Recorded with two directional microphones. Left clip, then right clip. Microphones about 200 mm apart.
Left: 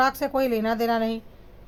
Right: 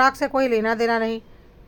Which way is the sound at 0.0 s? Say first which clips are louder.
Right 4 dB; 15° right (ahead or behind).